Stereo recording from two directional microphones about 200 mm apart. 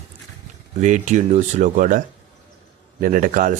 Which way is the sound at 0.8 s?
40° right (ahead or behind).